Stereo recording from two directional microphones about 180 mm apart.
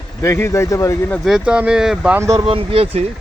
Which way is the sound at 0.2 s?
15° left (ahead or behind).